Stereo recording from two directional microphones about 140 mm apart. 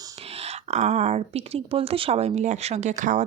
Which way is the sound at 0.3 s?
50° right (ahead or behind).